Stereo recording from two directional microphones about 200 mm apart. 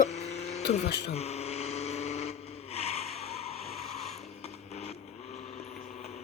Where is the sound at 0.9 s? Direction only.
55° left (ahead or behind).